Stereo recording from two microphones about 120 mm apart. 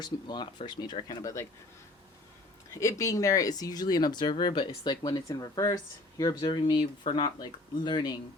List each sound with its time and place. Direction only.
0.0 s speech: 40° left (ahead or behind)
2.7 s speech: 25° left (ahead or behind)
6.1 s speech: 40° left (ahead or behind)